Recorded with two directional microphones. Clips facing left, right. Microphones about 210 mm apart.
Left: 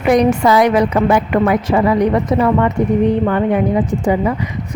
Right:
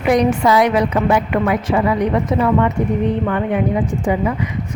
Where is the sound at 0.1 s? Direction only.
45° left (ahead or behind).